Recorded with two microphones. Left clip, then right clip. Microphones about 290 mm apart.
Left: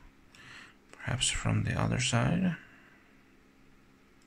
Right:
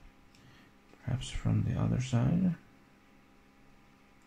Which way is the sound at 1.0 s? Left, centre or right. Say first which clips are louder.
Left 11 dB; left.